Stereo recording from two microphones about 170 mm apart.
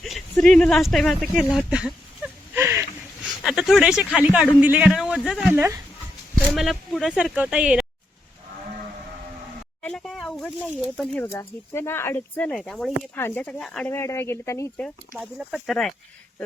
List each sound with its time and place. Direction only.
0.0 s speech: centre (ahead or behind)
2.2 s a sound: 10° right (ahead or behind)
3.4 s speech: 5° right (ahead or behind)
6.5 s speech: centre (ahead or behind)
9.8 s a sound: 5° left (ahead or behind)
11.3 s speech: 15° left (ahead or behind)
13.9 s speech: 15° left (ahead or behind)
15.2 s speech: centre (ahead or behind)